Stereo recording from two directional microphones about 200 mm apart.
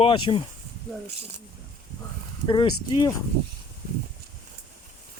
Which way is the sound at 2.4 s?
25° left (ahead or behind).